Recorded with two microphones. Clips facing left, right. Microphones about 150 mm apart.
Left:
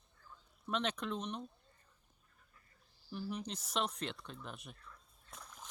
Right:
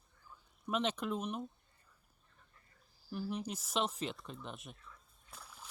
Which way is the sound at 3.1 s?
10° right (ahead or behind).